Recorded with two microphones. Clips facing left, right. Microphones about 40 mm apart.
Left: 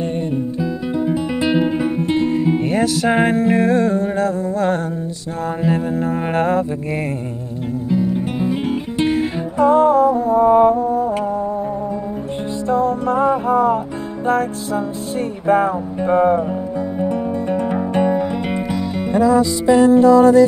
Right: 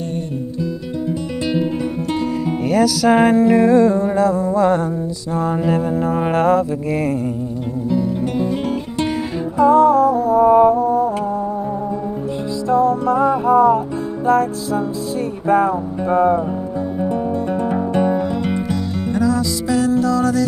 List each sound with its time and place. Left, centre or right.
0.6 s music: centre
3.4 s music: left
5.7 s mantra: centre
7.9 s music: centre
9.6 s music: left
10.8 s music: right
11.1 s music: left
12.6 s music: left
18.1 s music: centre